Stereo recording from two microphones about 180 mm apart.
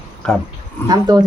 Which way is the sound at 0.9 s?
20° right (ahead or behind).